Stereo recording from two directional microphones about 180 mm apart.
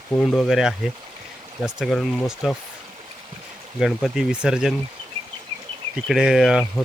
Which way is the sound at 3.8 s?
Centre (ahead or behind).